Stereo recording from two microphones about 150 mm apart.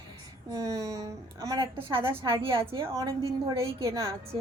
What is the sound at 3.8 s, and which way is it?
Speech, 20° right (ahead or behind).